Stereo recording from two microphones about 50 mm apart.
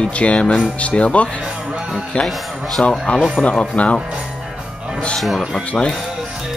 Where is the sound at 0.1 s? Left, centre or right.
Left.